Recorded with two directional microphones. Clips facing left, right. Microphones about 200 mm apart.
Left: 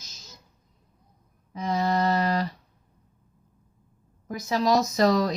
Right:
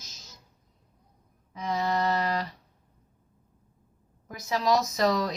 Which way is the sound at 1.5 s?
35° left (ahead or behind).